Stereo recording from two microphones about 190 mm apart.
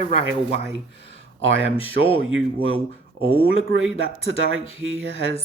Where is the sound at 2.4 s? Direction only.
90° right.